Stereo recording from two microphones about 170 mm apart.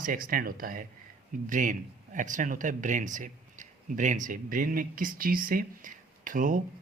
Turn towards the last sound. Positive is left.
turn(degrees=-50)  # may be behind; listen again after turning